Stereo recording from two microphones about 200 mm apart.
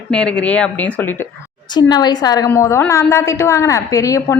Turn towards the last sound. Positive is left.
turn(degrees=15)  # may be behind; listen again after turning